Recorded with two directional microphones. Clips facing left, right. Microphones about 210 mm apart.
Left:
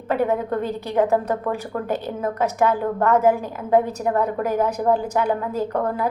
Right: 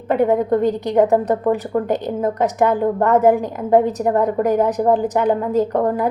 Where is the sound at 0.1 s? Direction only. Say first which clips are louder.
Right 6 dB; 15° right (ahead or behind).